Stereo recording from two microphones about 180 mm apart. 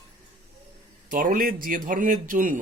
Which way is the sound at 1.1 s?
50° right (ahead or behind).